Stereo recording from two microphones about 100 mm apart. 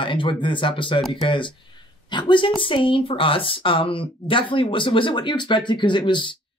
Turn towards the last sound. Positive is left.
turn(degrees=50)  # may be behind; listen again after turning